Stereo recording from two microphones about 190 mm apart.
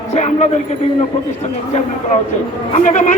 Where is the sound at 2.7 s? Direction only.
40° left (ahead or behind).